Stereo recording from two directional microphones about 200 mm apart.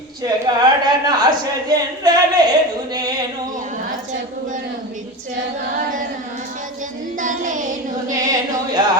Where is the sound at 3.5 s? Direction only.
40° right (ahead or behind).